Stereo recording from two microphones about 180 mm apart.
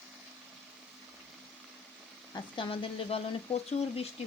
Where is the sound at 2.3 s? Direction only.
30° left (ahead or behind).